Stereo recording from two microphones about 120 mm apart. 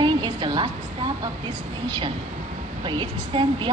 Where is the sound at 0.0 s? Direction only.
40° right (ahead or behind).